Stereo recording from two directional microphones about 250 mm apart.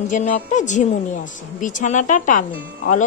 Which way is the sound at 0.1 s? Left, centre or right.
Left.